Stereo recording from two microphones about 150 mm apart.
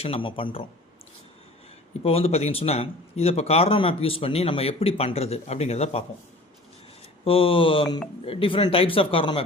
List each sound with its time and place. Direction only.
0.0 s a man's voice: 35° left (ahead or behind)
2.0 s a man's voice: 40° left (ahead or behind)
7.3 s a man's voice: 35° left (ahead or behind)